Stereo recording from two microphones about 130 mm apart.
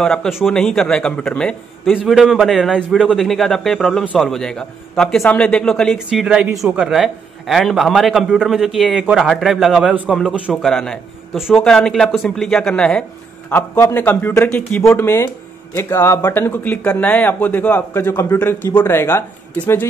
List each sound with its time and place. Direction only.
0.0 s a man's voice: 5° left (ahead or behind)
13.5 s speech: 15° left (ahead or behind)